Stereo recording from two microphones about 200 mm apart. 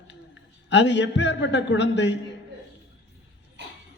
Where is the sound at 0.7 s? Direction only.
60° left (ahead or behind).